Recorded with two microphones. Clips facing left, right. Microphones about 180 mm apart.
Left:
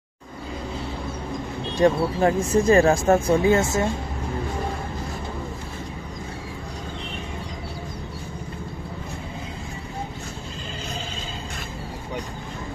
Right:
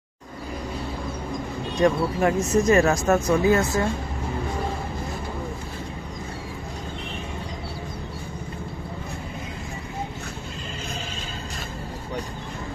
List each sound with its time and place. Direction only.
1.8 s speech: 30° left (ahead or behind)